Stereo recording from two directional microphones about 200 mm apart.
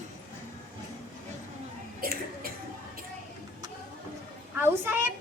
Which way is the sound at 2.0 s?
50° right (ahead or behind).